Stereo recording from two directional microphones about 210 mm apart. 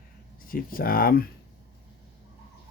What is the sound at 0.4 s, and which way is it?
Speech, 45° left (ahead or behind).